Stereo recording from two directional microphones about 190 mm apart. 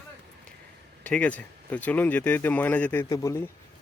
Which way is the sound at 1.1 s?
5° left (ahead or behind).